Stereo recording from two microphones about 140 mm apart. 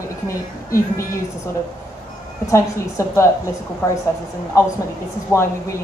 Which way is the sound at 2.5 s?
20° left (ahead or behind).